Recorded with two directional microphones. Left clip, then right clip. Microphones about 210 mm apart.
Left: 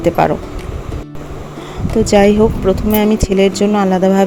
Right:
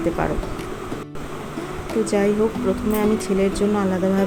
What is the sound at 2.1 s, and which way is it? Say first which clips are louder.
Speech: left 11 dB; 35° left (ahead or behind).